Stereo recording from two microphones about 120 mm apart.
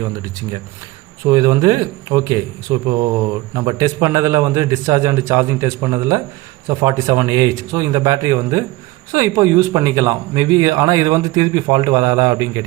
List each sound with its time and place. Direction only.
1.2 s a man's voice: 30° right (ahead or behind)